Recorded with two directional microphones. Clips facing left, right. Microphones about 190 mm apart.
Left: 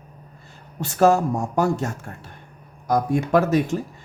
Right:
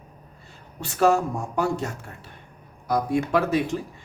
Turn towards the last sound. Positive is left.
turn(degrees=45)  # may be behind; listen again after turning